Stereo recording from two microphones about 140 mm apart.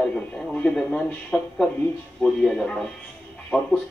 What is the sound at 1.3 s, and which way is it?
Speech, 10° left (ahead or behind).